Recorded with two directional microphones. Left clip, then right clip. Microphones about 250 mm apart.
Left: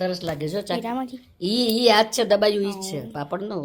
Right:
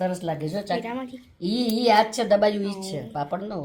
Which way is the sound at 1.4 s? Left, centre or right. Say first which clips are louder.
Left 4 dB; left.